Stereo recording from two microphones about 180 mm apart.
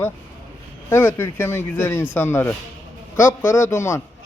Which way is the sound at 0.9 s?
10° left (ahead or behind).